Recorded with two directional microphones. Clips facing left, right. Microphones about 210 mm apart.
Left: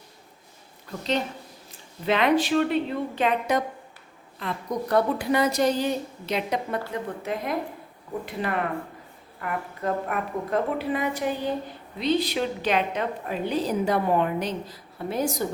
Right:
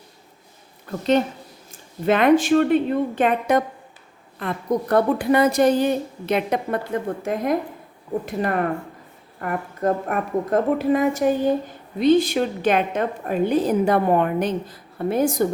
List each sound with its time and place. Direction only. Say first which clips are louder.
0.9 s a woman's voice: right 8 dB; 50° right (ahead or behind)